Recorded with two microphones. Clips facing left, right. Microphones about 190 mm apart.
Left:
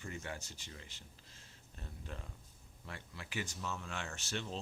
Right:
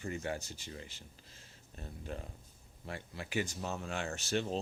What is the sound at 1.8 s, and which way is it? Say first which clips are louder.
Speech: right 6 dB; 40° right (ahead or behind).